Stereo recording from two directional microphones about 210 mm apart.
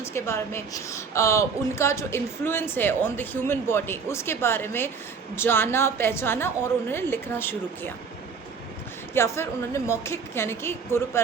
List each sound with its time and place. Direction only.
0.0 s a woman's voice: 15° left (ahead or behind)
9.1 s a woman's voice: 10° left (ahead or behind)